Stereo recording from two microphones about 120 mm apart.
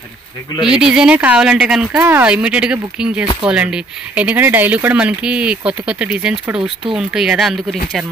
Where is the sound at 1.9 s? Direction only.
15° right (ahead or behind).